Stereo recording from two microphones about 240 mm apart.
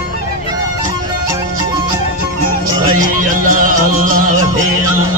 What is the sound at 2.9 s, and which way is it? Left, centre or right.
Music, right.